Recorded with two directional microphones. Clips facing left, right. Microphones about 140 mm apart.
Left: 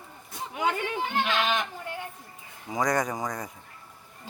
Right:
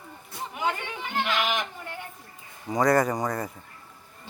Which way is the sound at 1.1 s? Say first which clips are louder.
Right 1 dB; 25° left (ahead or behind).